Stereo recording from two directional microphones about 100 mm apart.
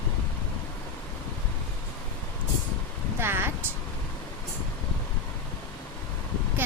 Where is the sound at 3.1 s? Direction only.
25° right (ahead or behind).